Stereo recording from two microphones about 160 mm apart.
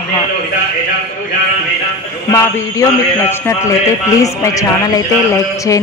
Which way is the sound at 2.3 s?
20° left (ahead or behind).